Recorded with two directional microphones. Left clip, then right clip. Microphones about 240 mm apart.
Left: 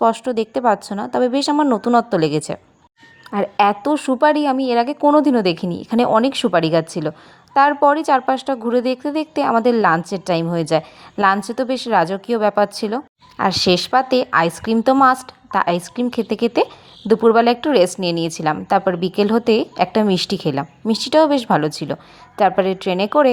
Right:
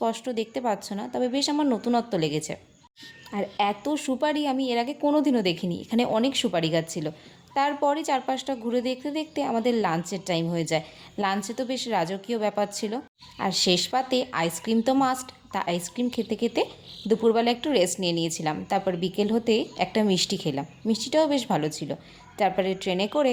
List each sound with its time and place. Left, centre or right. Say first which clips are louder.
0.0 s a woman's voice: left 11 dB; left